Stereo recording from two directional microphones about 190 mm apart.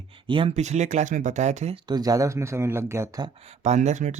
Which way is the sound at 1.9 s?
20° right (ahead or behind).